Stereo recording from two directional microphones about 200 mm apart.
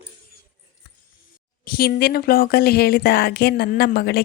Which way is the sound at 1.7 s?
50° left (ahead or behind).